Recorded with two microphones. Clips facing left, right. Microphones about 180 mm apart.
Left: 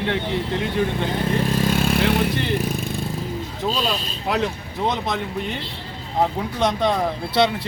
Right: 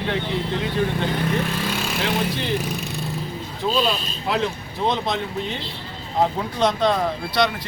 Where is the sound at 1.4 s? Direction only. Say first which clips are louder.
Left 6 dB; 45° left (ahead or behind).